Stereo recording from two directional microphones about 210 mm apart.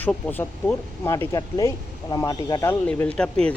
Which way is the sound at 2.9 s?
5° left (ahead or behind).